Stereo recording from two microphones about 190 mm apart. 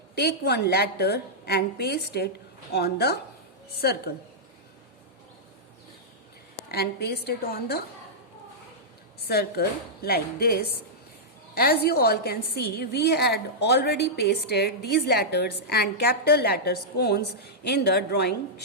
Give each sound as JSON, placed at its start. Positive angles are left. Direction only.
{"t": 0.2, "sound": "a woman's voice", "side_deg": 60}
{"t": 6.7, "sound": "a woman's voice", "side_deg": 55}
{"t": 9.2, "sound": "a woman's voice", "side_deg": 55}